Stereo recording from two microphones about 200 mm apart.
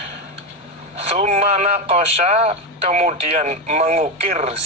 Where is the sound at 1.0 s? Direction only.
30° right (ahead or behind).